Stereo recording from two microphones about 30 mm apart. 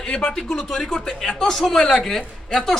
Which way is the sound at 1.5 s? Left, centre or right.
Centre.